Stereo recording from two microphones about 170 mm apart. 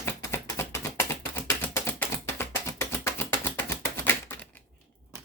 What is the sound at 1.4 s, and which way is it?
Typing, 15° left (ahead or behind).